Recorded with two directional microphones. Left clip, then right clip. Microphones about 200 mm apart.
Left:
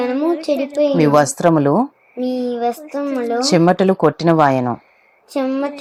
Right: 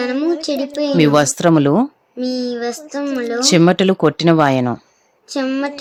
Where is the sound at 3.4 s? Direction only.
30° right (ahead or behind).